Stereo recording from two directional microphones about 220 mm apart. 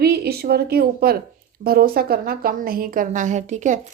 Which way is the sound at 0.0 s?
45° right (ahead or behind).